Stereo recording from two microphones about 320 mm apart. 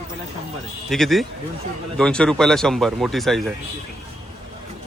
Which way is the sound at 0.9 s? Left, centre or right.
Centre.